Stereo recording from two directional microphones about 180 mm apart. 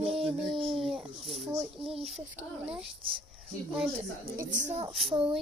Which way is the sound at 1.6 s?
30° right (ahead or behind).